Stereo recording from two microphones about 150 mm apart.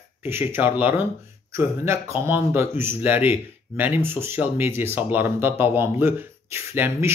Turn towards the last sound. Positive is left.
turn(degrees=-15)  # may be behind; listen again after turning